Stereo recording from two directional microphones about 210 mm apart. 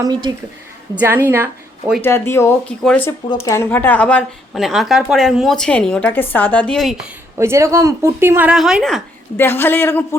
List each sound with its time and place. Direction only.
0.0 s a woman's voice: 20° right (ahead or behind)
0.9 s speech: 10° right (ahead or behind)
2.0 s speech: 10° left (ahead or behind)
7.3 s speech: 15° right (ahead or behind)
9.4 s speech: 10° left (ahead or behind)